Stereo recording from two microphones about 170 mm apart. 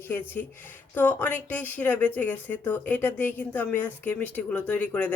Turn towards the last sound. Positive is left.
turn(degrees=10)  # may be behind; listen again after turning